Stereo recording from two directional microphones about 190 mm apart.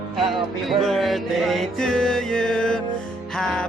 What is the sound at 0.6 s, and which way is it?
Music, centre (ahead or behind).